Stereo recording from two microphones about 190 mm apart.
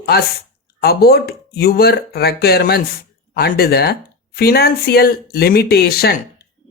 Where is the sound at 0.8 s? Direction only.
55° left (ahead or behind).